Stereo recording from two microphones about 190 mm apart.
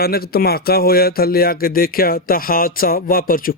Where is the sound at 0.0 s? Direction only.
55° left (ahead or behind).